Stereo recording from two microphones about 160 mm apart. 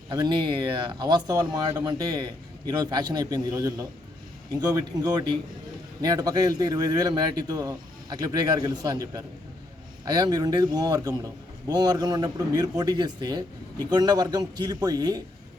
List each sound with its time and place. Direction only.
0.1 s a man's voice: 25° right (ahead or behind)